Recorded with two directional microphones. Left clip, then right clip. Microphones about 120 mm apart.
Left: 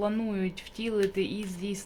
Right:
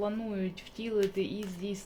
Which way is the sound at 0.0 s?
45° left (ahead or behind).